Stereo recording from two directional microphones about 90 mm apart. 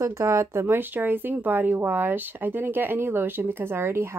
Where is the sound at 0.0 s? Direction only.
30° right (ahead or behind).